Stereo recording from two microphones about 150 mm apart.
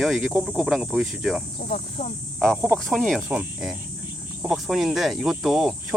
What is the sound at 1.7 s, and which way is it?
Speech, 55° left (ahead or behind).